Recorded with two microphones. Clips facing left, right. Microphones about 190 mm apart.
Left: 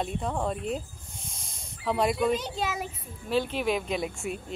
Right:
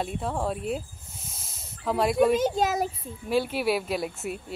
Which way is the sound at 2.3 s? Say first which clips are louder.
Right 7 dB; 45° right (ahead or behind).